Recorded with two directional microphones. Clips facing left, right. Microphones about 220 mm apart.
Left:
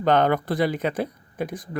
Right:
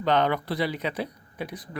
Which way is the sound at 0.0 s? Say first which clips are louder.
Left 4 dB; 50° left (ahead or behind).